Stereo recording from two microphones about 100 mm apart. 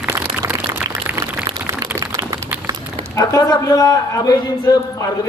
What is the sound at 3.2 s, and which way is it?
A man's voice, 40° left (ahead or behind).